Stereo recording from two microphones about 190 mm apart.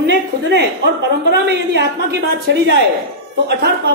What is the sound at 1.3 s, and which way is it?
Speech, 65° right (ahead or behind).